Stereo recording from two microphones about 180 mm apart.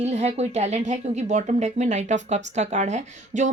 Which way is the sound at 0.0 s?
35° right (ahead or behind).